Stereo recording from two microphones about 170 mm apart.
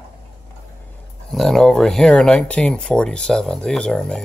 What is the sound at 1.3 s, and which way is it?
Speech, centre (ahead or behind).